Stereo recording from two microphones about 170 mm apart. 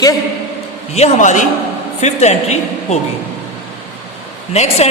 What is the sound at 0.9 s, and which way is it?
A woman's voice, 40° left (ahead or behind).